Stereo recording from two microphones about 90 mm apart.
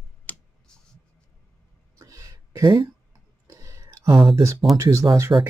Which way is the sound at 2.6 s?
55° right (ahead or behind).